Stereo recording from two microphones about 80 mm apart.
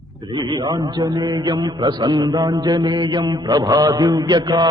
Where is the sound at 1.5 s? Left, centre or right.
Right.